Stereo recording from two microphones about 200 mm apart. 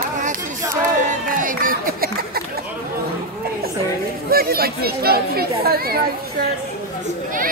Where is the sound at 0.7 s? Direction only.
45° right (ahead or behind).